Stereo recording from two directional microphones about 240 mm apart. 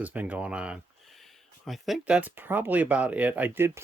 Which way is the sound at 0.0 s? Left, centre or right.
Centre.